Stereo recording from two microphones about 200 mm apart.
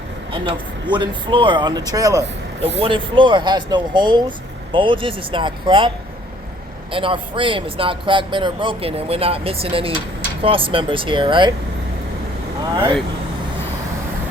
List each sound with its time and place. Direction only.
0.3 s speech: 25° right (ahead or behind)
6.9 s speech: 25° right (ahead or behind)
12.7 s speech: 20° right (ahead or behind)